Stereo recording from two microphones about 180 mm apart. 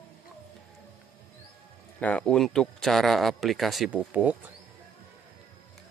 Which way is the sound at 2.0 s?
5° left (ahead or behind).